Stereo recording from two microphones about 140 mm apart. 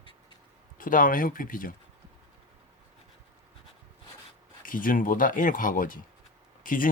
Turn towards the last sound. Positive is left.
turn(degrees=75)  # may be behind; listen again after turning